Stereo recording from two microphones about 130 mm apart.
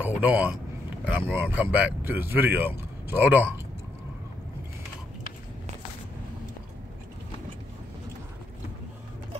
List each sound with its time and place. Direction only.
0.0 s speech: 10° right (ahead or behind)